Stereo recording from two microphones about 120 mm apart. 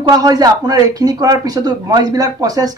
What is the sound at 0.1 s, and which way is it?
A man's voice, 30° right (ahead or behind).